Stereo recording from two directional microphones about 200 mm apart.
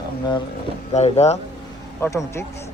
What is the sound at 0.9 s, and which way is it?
Speech, 35° left (ahead or behind).